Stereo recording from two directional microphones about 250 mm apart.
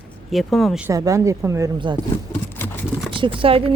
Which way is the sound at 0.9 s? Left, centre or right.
Centre.